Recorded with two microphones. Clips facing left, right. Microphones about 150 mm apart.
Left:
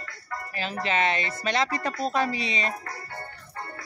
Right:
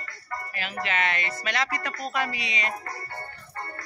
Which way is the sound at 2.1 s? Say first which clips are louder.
Left 2 dB; 30° left (ahead or behind).